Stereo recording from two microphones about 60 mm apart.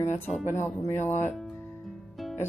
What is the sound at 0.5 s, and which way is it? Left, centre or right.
Speech, left.